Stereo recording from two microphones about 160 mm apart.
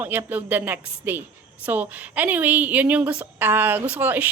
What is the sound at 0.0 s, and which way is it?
A woman's voice, 10° right (ahead or behind).